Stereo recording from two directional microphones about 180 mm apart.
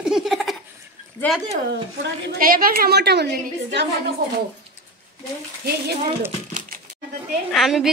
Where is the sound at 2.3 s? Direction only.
50° right (ahead or behind); by 3.8 s 65° right (ahead or behind).